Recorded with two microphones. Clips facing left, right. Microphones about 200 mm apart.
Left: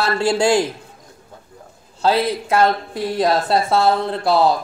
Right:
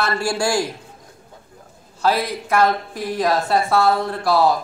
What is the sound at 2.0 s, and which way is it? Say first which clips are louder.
A woman's voice: left 3 dB; 25° left (ahead or behind).